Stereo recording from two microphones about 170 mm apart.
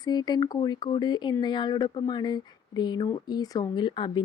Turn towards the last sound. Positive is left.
turn(degrees=30)  # may be behind; listen again after turning